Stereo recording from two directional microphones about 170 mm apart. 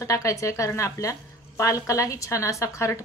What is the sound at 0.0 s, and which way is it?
A woman's voice, 20° left (ahead or behind).